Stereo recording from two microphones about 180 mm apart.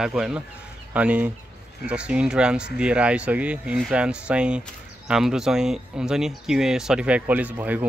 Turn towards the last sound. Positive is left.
turn(degrees=-10)  # may be behind; listen again after turning